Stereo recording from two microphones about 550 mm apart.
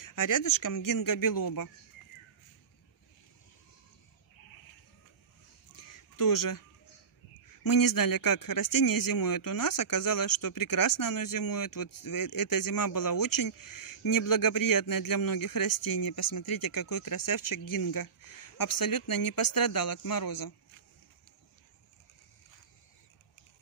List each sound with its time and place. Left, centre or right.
0.0 s speech: left
5.8 s chicken: left
7.4 s speech: left